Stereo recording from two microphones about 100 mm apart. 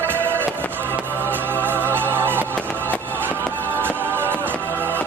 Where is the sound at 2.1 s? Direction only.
20° right (ahead or behind).